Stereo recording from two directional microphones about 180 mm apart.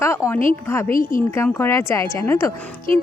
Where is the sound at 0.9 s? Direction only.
50° left (ahead or behind).